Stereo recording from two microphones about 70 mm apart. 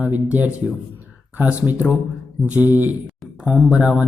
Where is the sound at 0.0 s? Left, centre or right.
Right.